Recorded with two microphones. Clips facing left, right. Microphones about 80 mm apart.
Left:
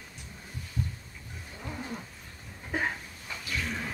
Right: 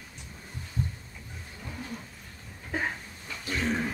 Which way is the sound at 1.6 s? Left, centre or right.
Centre.